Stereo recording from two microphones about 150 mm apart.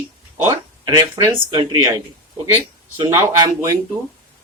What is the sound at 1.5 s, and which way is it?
Speech, 30° right (ahead or behind).